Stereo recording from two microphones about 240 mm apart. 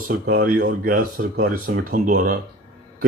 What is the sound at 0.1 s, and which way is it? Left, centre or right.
Speech, right.